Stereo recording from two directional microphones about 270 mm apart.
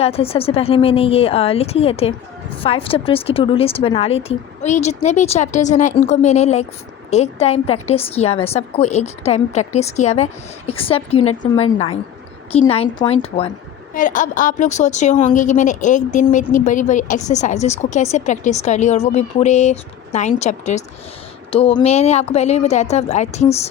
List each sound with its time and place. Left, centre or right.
0.0 s a woman's voice: left